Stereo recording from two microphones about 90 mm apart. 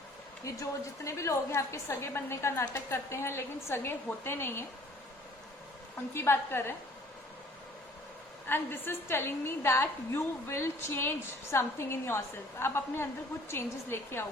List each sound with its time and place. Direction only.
0.4 s a woman's voice: 35° left (ahead or behind)
6.1 s a woman's voice: 25° left (ahead or behind)
8.4 s a woman's voice: 25° left (ahead or behind)